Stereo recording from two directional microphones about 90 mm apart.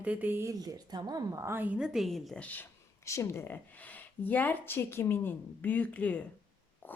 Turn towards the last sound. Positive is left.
turn(degrees=20)  # may be behind; listen again after turning